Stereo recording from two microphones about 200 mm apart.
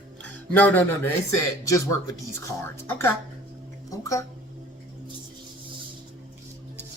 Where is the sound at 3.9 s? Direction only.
15° left (ahead or behind).